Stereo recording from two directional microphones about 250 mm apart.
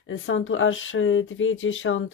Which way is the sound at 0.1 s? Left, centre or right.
Left.